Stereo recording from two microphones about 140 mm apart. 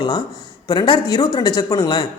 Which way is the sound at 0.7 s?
30° left (ahead or behind).